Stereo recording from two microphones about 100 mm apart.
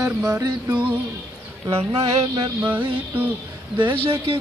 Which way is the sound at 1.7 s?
90° right.